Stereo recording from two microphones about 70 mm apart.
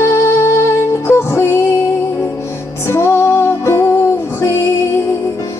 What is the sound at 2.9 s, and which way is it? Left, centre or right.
Music, left.